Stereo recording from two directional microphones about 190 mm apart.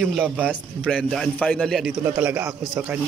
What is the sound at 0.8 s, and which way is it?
Speech, 5° left (ahead or behind).